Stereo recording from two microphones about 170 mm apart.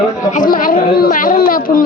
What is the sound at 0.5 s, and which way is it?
A woman's voice, 55° left (ahead or behind).